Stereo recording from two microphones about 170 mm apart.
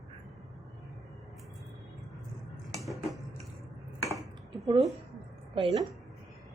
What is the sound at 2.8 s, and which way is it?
Cutlery, centre (ahead or behind).